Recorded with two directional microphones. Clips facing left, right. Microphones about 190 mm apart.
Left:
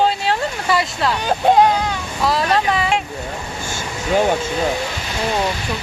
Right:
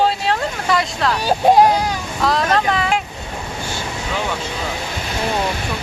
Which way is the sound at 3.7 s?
45° left (ahead or behind).